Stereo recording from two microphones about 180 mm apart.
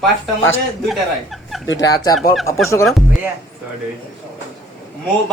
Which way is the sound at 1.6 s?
90° left.